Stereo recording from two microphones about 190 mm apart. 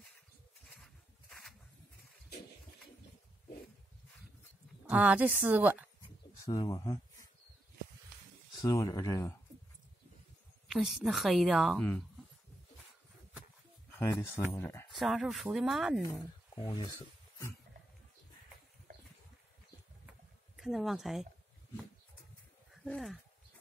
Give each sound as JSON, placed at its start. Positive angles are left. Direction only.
{"t": 0.7, "sound": "a sound", "side_deg": 0}
{"t": 4.8, "sound": "a woman's voice", "side_deg": -5}
{"t": 6.0, "sound": "a sound", "side_deg": 25}
{"t": 8.5, "sound": "speech", "side_deg": 15}
{"t": 10.7, "sound": "a woman's voice", "side_deg": 0}
{"t": 14.3, "sound": "speech", "side_deg": 15}
{"t": 15.0, "sound": "a woman's voice", "side_deg": 0}
{"t": 16.5, "sound": "speech", "side_deg": 25}
{"t": 20.5, "sound": "speech", "side_deg": 0}
{"t": 22.8, "sound": "a woman's voice", "side_deg": 0}